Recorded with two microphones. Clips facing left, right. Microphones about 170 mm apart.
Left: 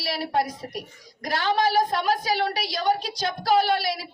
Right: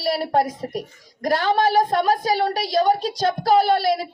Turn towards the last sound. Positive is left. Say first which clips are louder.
# right 5 dB
turn(degrees=-40)  # may be behind; listen again after turning